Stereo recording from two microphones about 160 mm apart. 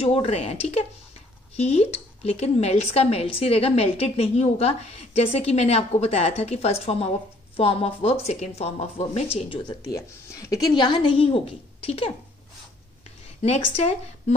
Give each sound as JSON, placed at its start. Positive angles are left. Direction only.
{"t": 0.0, "sound": "a woman's voice", "side_deg": 35}
{"t": 13.4, "sound": "speech", "side_deg": 40}